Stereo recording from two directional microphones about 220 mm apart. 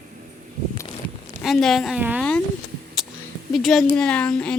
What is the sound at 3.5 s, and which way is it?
A child's voice, centre (ahead or behind).